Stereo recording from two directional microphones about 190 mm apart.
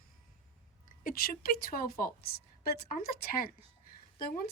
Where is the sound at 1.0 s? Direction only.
50° left (ahead or behind).